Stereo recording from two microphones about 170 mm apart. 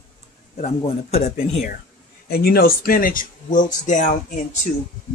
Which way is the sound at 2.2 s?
65° left (ahead or behind).